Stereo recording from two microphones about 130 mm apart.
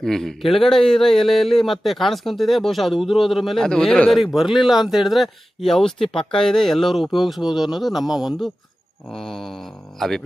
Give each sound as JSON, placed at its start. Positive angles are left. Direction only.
{"t": 0.0, "sound": "a man's voice", "side_deg": 5}